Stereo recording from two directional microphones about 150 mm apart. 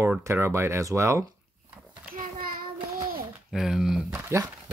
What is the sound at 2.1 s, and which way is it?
Child singing, 65° right (ahead or behind).